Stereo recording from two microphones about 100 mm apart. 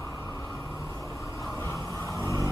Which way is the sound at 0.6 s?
30° left (ahead or behind).